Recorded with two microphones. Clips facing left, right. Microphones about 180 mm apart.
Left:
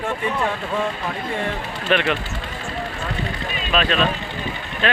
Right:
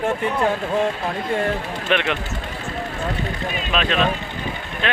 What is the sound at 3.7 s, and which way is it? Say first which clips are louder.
A man's voice: left 1 dB; 20° right (ahead or behind).